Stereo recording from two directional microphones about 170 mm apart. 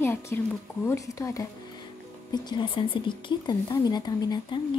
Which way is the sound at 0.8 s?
20° left (ahead or behind).